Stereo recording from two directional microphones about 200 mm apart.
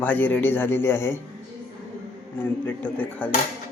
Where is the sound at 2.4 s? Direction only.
10° left (ahead or behind).